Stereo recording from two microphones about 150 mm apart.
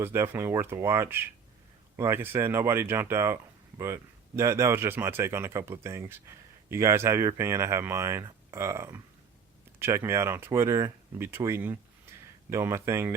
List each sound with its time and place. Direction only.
0.0 s speech: 15° right (ahead or behind)